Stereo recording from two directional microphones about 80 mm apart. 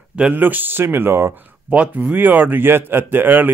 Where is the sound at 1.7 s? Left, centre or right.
Centre.